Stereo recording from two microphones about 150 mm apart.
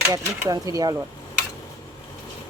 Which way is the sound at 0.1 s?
25° right (ahead or behind).